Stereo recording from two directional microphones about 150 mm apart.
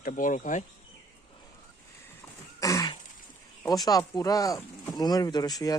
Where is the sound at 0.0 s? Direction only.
60° left (ahead or behind).